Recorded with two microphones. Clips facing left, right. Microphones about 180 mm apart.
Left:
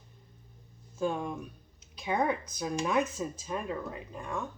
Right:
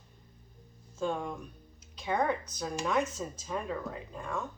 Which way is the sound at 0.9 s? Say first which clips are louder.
Left 2 dB; 15° left (ahead or behind).